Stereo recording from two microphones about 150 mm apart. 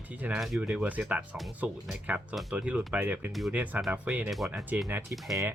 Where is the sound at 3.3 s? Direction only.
Centre (ahead or behind).